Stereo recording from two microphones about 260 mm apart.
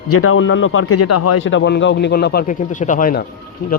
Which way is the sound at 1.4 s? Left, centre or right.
Left.